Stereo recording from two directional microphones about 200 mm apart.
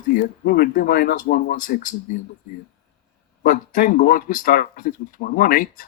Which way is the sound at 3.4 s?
45° left (ahead or behind).